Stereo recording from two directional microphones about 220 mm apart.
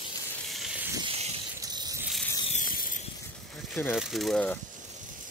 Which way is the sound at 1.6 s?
15° right (ahead or behind).